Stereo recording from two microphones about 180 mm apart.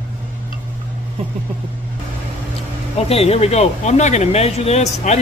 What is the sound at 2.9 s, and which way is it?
Speech, 35° left (ahead or behind).